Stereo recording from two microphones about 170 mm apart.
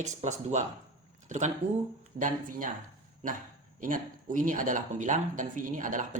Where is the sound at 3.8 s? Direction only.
50° right (ahead or behind).